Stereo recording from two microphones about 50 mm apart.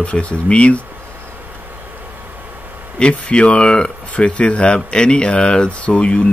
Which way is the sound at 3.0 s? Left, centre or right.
Left.